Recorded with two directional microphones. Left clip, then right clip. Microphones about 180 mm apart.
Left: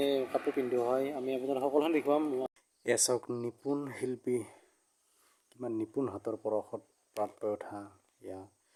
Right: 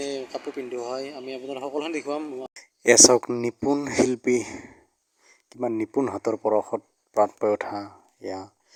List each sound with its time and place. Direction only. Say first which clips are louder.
0.0 s speech: even; 5° left (ahead or behind)
2.5 s a sound: right 13 dB; 35° right (ahead or behind)
3.7 s speech: right 10 dB; 25° right (ahead or behind)
3.9 s speech: right 13 dB; 35° right (ahead or behind)